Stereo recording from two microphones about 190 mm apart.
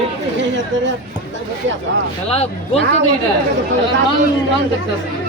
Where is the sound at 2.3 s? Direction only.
30° left (ahead or behind).